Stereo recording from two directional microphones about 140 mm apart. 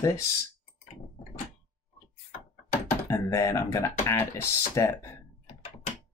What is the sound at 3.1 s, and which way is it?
Speech, 20° left (ahead or behind).